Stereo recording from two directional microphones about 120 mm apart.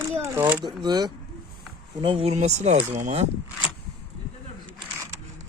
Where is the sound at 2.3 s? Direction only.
70° right (ahead or behind).